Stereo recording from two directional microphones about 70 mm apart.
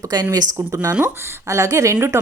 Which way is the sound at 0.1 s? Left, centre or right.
Right.